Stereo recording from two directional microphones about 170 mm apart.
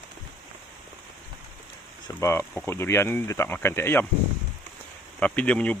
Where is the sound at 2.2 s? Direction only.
15° left (ahead or behind).